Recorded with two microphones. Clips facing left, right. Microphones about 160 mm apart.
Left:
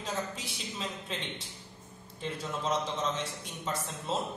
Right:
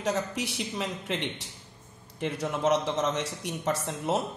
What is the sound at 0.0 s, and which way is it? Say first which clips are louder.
A man's voice: right 7 dB; 70° right (ahead or behind).